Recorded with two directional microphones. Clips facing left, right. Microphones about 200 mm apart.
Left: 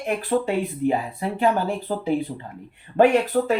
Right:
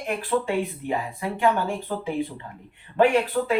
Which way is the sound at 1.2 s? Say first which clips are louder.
Left 1 dB; 35° left (ahead or behind).